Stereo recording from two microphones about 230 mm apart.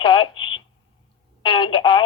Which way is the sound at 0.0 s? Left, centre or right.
Left.